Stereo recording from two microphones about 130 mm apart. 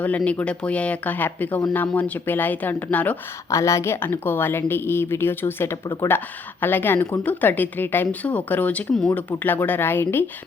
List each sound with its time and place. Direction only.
0.3 s speech: 10° left (ahead or behind)
3.5 s speech: 20° left (ahead or behind)